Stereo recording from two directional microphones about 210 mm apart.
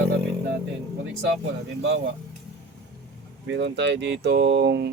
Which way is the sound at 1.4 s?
60° right (ahead or behind).